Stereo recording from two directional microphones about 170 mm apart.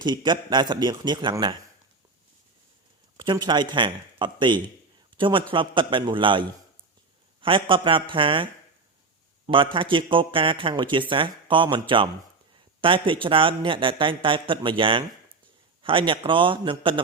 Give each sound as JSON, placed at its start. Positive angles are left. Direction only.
{"t": 0.0, "sound": "speech", "side_deg": -25}
{"t": 3.2, "sound": "speech", "side_deg": -25}
{"t": 7.4, "sound": "speech", "side_deg": -30}
{"t": 9.5, "sound": "speech", "side_deg": -30}